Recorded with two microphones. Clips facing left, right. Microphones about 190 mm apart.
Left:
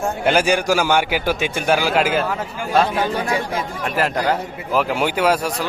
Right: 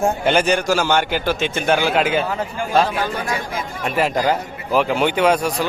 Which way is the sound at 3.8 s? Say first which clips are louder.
Right 3 dB; centre (ahead or behind).